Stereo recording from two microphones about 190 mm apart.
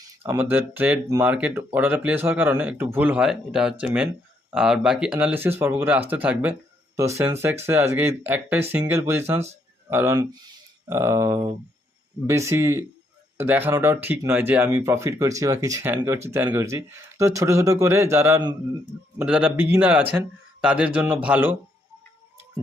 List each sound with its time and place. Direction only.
0.2 s speech: 10° right (ahead or behind)